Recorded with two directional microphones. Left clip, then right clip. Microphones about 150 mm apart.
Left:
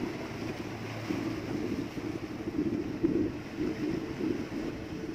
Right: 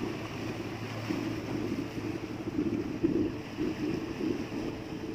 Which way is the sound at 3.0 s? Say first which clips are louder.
Even; centre (ahead or behind).